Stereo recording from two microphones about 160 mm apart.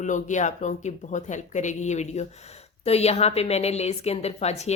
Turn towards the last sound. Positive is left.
turn(degrees=40)  # may be behind; listen again after turning